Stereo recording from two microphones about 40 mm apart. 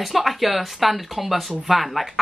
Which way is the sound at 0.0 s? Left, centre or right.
Centre.